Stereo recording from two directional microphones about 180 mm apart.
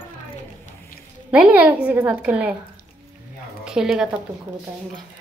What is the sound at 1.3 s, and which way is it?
A woman's voice, 10° right (ahead or behind).